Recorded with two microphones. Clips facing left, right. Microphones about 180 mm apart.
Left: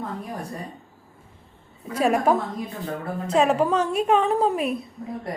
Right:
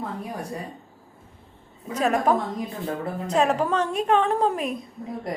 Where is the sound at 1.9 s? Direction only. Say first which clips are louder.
Left 1 dB; 10° left (ahead or behind).